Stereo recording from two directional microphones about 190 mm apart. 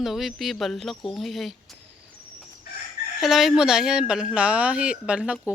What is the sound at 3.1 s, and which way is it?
Speech, centre (ahead or behind).